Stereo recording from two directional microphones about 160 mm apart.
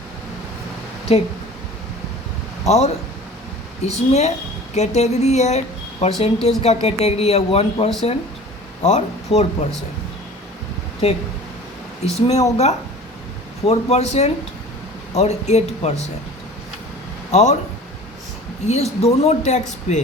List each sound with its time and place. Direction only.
1.1 s speech: 40° left (ahead or behind)
2.6 s speech: 40° left (ahead or behind)
11.0 s speech: 40° left (ahead or behind)
17.3 s speech: 45° left (ahead or behind)
18.7 s speech: 40° left (ahead or behind)